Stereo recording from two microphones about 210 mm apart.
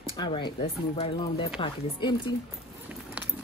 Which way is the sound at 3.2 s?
5° right (ahead or behind).